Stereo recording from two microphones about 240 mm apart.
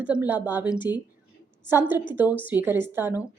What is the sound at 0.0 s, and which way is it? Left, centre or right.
A woman's voice, centre.